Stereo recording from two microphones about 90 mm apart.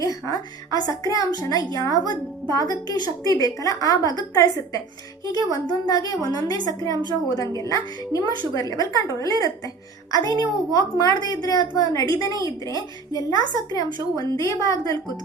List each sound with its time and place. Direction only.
0.0 s a woman's voice: 40° left (ahead or behind)
6.9 s a woman's voice: 55° right (ahead or behind)
7.3 s a woman's voice: 40° left (ahead or behind)